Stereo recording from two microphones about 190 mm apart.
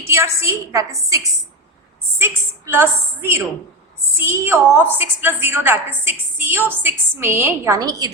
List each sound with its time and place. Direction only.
0.1 s a woman's voice: 15° right (ahead or behind)